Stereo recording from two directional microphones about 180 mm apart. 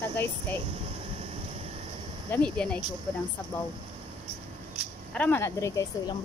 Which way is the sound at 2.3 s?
5° left (ahead or behind).